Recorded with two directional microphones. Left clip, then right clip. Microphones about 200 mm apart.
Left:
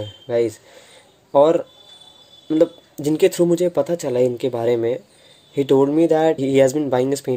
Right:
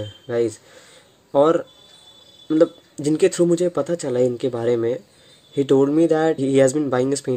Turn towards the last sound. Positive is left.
turn(degrees=-20)  # may be behind; listen again after turning